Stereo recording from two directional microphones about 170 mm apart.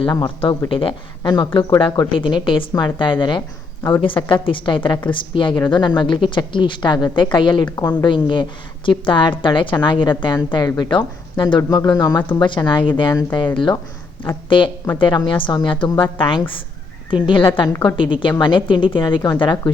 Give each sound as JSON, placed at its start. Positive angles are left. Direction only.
{"t": 0.0, "sound": "a woman's voice", "side_deg": 25}
{"t": 1.8, "sound": "a woman's voice", "side_deg": 30}
{"t": 14.9, "sound": "a woman's voice", "side_deg": 25}